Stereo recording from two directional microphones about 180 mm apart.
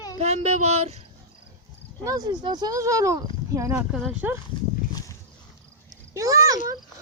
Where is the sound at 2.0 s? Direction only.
20° right (ahead or behind).